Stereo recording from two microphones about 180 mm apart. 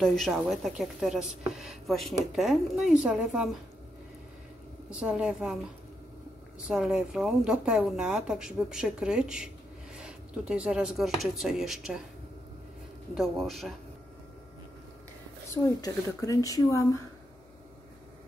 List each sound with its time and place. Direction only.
0.0 s speech: centre (ahead or behind)
4.9 s speech: 5° right (ahead or behind)
6.7 s speech: 5° right (ahead or behind)
13.1 s speech: centre (ahead or behind)
15.5 s a woman's voice: 20° left (ahead or behind)